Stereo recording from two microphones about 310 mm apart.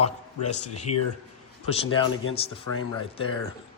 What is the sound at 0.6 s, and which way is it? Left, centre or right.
Speech, left.